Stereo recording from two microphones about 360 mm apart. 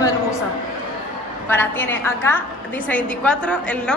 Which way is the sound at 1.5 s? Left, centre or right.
Centre.